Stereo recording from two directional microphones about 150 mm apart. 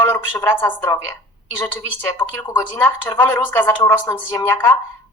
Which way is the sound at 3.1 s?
30° left (ahead or behind).